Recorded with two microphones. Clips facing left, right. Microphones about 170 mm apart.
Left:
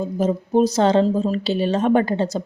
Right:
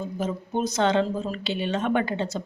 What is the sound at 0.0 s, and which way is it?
Speech, 35° left (ahead or behind).